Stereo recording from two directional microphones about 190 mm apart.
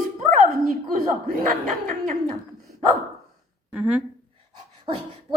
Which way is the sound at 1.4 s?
45° right (ahead or behind).